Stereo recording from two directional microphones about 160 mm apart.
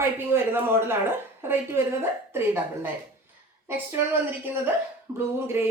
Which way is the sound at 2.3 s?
15° right (ahead or behind).